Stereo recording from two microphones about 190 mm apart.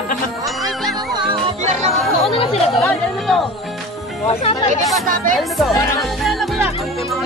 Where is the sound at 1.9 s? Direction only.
30° left (ahead or behind).